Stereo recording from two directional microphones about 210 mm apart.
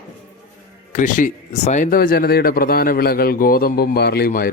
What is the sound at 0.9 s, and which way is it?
Speech, 40° left (ahead or behind).